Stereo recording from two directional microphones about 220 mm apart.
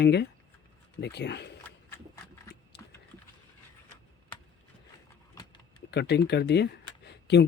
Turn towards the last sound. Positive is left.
turn(degrees=50)  # may be behind; listen again after turning